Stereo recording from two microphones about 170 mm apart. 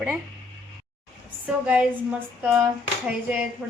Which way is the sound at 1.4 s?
10° right (ahead or behind).